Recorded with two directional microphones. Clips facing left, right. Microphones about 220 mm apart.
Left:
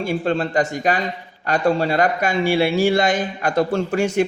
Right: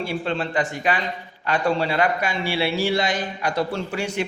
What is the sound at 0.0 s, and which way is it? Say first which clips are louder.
A man's voice: left 5 dB; 45° left (ahead or behind).